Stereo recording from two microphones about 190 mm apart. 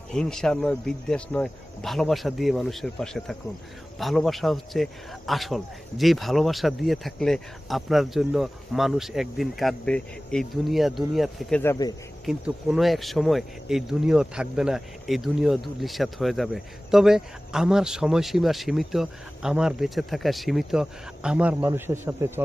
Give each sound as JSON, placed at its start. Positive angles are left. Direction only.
{"t": 0.1, "sound": "speech", "side_deg": 5}
{"t": 11.6, "sound": "speech", "side_deg": 15}
{"t": 12.2, "sound": "speech", "side_deg": 0}